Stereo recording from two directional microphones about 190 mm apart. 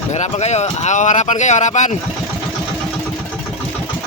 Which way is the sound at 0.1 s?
35° left (ahead or behind).